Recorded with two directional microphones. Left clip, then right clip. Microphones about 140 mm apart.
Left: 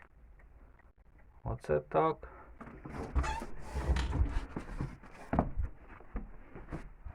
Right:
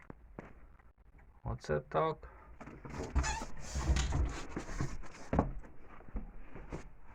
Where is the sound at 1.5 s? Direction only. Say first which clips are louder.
Left 4 dB; 15° left (ahead or behind).